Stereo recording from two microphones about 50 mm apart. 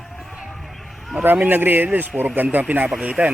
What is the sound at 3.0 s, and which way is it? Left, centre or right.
Speech, right.